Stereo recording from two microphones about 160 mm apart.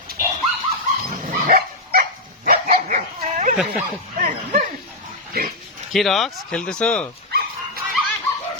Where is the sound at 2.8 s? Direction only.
50° right (ahead or behind).